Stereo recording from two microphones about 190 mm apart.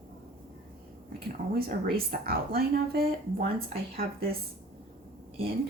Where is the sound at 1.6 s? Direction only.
50° right (ahead or behind).